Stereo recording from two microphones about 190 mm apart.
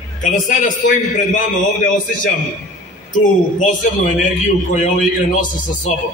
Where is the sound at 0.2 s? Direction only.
40° left (ahead or behind).